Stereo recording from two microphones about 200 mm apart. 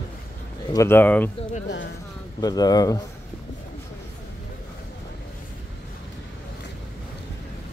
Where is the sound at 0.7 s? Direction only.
10° left (ahead or behind).